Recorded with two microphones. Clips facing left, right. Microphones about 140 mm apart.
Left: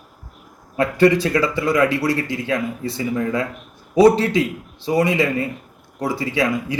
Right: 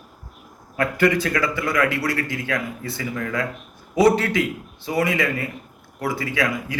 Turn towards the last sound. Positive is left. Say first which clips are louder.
# left 4 dB
turn(degrees=25)  # may be behind; listen again after turning